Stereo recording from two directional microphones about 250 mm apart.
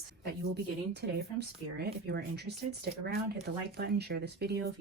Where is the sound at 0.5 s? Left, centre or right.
Right.